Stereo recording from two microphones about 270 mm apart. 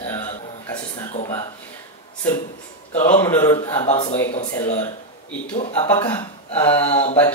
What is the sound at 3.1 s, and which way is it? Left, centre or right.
Speech, centre.